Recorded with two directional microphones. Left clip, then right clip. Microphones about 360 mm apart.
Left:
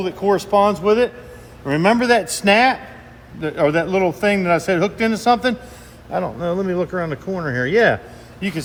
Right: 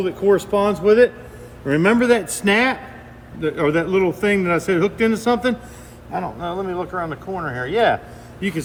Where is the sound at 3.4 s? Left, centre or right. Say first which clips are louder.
Left 2 dB; left.